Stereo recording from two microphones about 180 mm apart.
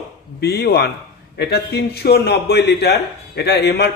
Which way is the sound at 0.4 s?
60° left (ahead or behind).